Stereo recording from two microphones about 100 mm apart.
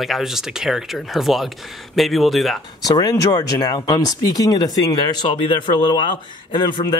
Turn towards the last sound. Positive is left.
turn(degrees=45)  # may be behind; listen again after turning